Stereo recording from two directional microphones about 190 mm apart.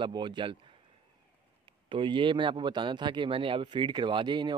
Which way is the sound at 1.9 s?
25° right (ahead or behind).